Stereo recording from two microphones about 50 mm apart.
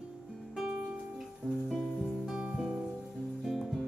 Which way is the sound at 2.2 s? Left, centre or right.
Centre.